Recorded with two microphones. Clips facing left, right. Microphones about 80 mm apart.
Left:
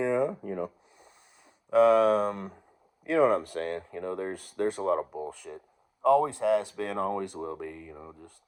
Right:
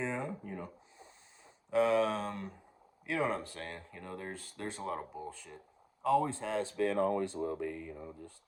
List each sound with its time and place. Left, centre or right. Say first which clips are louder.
0.0 s speech: left 10 dB; left
1.7 s speech: left 8 dB; left